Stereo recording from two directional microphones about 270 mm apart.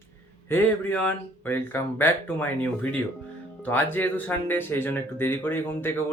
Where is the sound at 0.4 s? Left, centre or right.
Centre.